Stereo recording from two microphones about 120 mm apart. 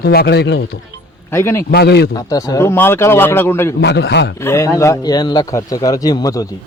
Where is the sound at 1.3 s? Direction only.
20° left (ahead or behind).